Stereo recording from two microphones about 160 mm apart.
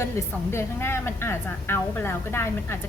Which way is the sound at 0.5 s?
15° left (ahead or behind).